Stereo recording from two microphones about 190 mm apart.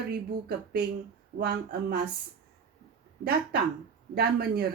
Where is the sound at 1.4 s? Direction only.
55° right (ahead or behind).